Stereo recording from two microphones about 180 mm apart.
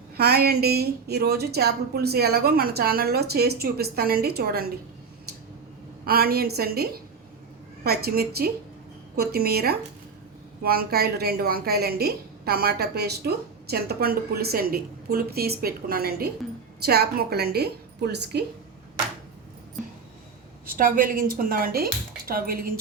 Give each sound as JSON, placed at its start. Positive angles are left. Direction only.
{"t": 0.2, "sound": "a woman's voice", "side_deg": -60}
{"t": 6.1, "sound": "a woman's voice", "side_deg": -55}
{"t": 20.7, "sound": "speech", "side_deg": -50}